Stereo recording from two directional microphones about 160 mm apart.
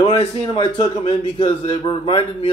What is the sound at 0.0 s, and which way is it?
A man's voice, 35° left (ahead or behind).